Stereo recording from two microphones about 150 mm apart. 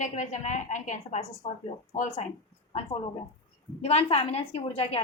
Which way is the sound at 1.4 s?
40° left (ahead or behind).